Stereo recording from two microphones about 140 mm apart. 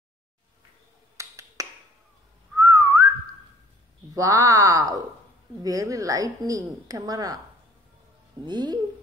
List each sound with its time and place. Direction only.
1.1 s finger snapping: 25° right (ahead or behind)
2.5 s whistling: 25° right (ahead or behind)
4.1 s a woman's voice: 25° right (ahead or behind)
8.5 s speech: 30° right (ahead or behind)